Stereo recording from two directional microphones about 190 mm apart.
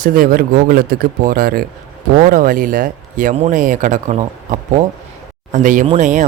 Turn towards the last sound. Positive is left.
turn(degrees=-40)  # may be behind; listen again after turning